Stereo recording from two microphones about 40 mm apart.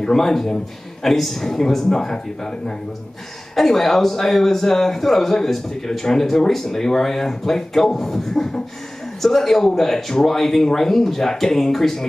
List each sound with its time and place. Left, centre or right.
0.0 s speech: centre
3.5 s speech: centre